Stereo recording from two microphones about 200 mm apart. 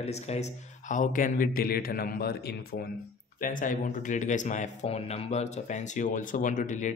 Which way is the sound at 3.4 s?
40° left (ahead or behind).